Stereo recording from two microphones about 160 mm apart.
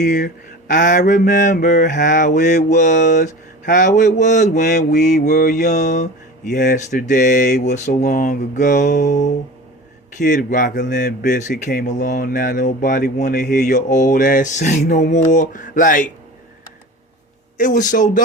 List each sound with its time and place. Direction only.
0.0 s speech: 50° left (ahead or behind)
17.6 s speech: 55° left (ahead or behind)